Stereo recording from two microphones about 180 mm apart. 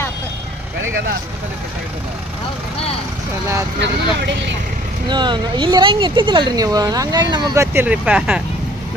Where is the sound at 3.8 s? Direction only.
75° right (ahead or behind).